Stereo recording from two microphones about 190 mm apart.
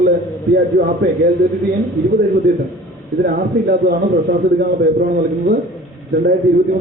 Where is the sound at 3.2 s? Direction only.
55° right (ahead or behind).